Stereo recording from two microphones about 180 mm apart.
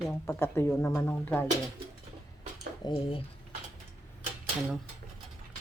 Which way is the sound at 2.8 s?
30° left (ahead or behind).